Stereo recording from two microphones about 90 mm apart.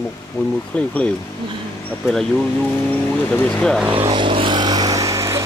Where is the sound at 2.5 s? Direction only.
20° left (ahead or behind).